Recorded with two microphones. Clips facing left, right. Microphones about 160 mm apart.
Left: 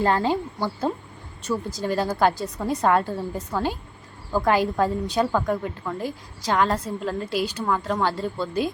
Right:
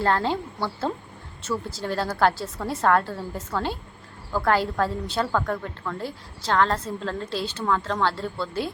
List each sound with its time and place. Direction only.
0.0 s a woman's voice: 15° left (ahead or behind)